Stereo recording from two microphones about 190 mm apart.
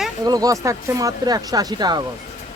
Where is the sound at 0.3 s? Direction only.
20° right (ahead or behind).